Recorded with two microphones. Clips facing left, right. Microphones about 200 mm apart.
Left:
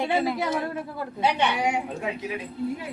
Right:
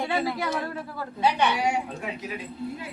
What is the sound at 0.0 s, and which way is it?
A woman's voice, 20° left (ahead or behind).